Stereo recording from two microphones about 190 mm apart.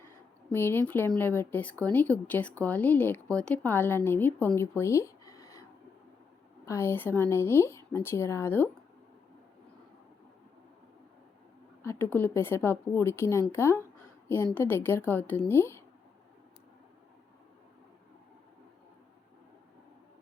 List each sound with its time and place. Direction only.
0.5 s speech: 10° left (ahead or behind)
4.6 s a sound: 15° left (ahead or behind)
6.7 s speech: 15° left (ahead or behind)
11.8 s speech: 10° left (ahead or behind)